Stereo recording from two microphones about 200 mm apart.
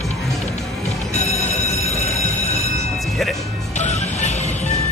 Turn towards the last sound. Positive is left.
turn(degrees=35)  # may be behind; listen again after turning